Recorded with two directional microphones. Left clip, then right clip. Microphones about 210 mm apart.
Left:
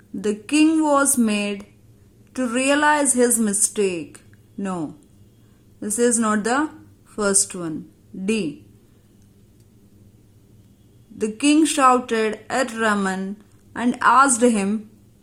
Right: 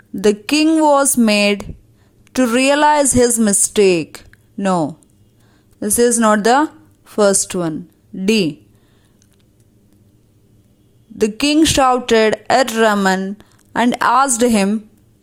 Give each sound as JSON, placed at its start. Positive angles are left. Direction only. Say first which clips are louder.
{"t": 0.2, "sound": "a woman's voice", "louder": "right 5 dB", "side_deg": -30}
{"t": 11.2, "sound": "a woman's voice", "louder": "right 4 dB", "side_deg": -30}